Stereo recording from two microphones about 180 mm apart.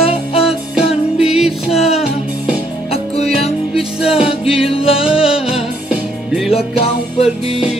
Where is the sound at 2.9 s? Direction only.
35° left (ahead or behind).